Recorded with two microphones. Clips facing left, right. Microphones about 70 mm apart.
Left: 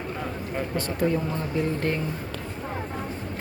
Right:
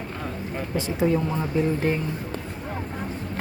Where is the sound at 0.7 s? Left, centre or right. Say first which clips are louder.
Right 3 dB; centre.